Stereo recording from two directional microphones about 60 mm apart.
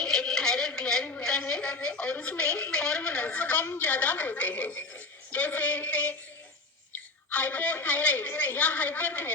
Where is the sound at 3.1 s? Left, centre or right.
Left.